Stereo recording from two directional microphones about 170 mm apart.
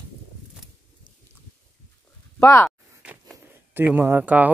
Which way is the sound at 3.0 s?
10° right (ahead or behind).